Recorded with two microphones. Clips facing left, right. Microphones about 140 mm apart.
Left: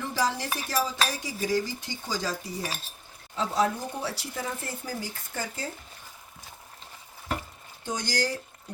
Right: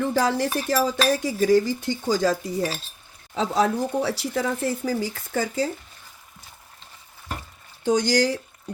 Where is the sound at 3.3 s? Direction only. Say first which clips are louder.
Right 5 dB; 75° right (ahead or behind).